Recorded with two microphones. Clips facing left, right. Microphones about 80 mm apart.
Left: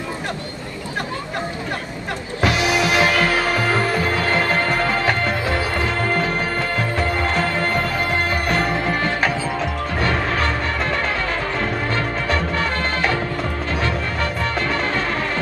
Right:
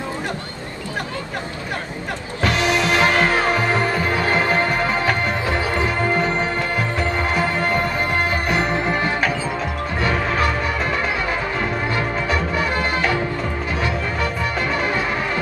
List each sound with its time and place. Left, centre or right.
2.4 s music: centre
3.1 s music: right
3.7 s music: centre
7.3 s music: centre